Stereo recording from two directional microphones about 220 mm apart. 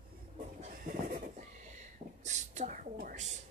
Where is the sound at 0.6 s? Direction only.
35° right (ahead or behind).